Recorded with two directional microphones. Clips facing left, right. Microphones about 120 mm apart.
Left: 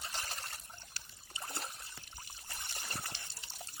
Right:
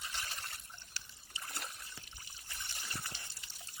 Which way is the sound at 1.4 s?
30° left (ahead or behind).